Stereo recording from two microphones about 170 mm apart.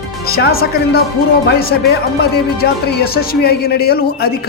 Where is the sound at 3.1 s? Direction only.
65° left (ahead or behind).